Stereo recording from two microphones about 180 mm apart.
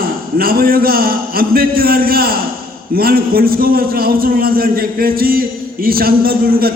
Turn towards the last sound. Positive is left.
turn(degrees=-55)  # may be behind; listen again after turning